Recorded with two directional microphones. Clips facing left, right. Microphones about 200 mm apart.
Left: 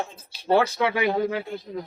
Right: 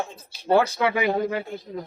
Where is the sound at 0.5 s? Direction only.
5° right (ahead or behind).